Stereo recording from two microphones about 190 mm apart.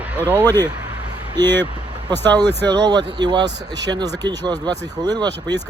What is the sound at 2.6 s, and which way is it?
Speech, 20° right (ahead or behind).